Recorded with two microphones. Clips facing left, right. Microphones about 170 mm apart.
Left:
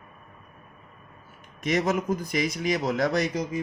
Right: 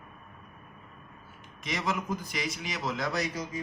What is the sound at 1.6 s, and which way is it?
Speech, 50° left (ahead or behind).